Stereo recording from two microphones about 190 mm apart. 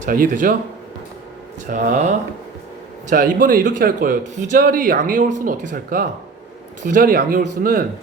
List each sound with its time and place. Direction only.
0.0 s a man's voice: 45° right (ahead or behind)
1.7 s a man's voice: 40° right (ahead or behind)